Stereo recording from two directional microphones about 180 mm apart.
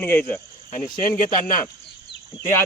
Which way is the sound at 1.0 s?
50° left (ahead or behind).